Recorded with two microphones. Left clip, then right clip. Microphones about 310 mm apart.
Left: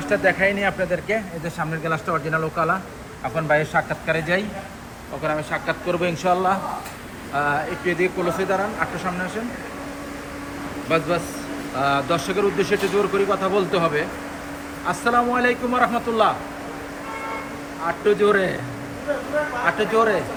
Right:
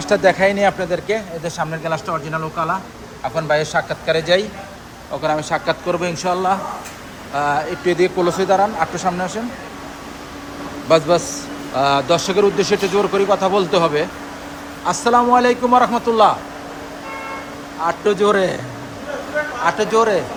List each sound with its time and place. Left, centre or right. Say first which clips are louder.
0.3 s a man's voice: right 5 dB; centre
10.8 s a man's voice: right 8 dB; centre
17.8 s a man's voice: right 3 dB; centre
19.6 s a man's voice: right 4 dB; centre